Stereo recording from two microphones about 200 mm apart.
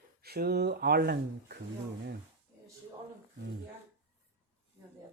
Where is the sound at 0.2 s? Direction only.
50° right (ahead or behind).